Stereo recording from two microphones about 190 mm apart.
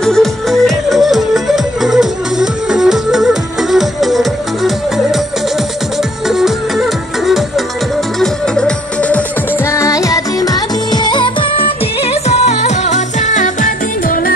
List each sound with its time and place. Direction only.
0.0 s music: centre (ahead or behind)
6.2 s music: centre (ahead or behind); by 14.3 s 45° left (ahead or behind)